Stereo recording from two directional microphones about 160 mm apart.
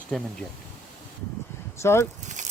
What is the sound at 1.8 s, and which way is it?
Speech, 15° left (ahead or behind).